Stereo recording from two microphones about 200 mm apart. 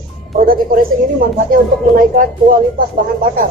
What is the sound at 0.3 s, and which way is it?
Speech, 45° right (ahead or behind).